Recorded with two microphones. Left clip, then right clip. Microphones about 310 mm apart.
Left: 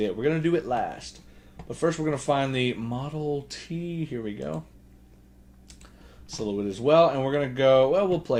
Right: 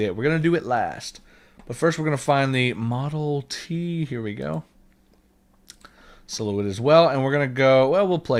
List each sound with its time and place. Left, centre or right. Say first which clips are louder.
0.0 s speech: right 3 dB; right
6.2 s speech: right 3 dB; right